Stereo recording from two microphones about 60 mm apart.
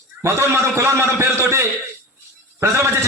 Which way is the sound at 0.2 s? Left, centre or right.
Right.